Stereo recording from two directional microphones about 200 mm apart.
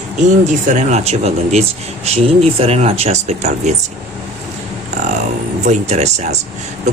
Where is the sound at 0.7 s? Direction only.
35° right (ahead or behind).